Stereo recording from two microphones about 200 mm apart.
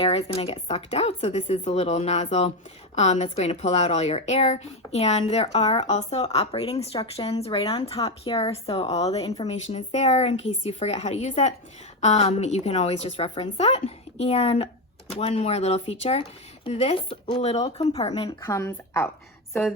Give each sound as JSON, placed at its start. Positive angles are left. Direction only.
{"t": 0.0, "sound": "speech", "side_deg": 30}
{"t": 18.3, "sound": "a woman's voice", "side_deg": 15}